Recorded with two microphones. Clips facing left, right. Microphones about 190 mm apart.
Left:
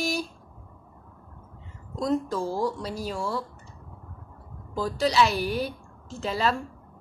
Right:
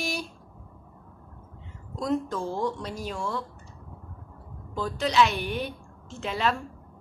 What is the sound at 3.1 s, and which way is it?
Speech, 5° left (ahead or behind).